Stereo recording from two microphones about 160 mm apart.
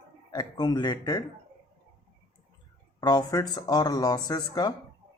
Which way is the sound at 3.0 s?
20° left (ahead or behind).